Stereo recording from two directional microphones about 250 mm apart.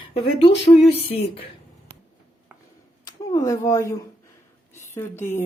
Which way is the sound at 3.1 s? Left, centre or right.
Centre.